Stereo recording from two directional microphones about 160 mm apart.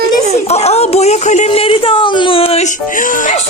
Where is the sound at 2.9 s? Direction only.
55° left (ahead or behind).